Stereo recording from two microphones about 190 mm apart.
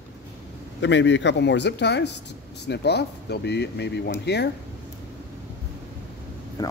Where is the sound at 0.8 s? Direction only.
70° left (ahead or behind).